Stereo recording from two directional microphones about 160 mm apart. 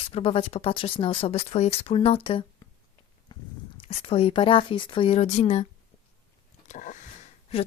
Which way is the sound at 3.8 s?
40° left (ahead or behind).